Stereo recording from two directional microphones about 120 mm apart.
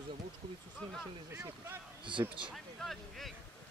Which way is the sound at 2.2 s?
25° right (ahead or behind).